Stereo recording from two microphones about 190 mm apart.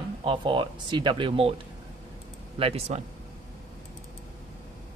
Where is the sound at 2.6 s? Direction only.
30° right (ahead or behind).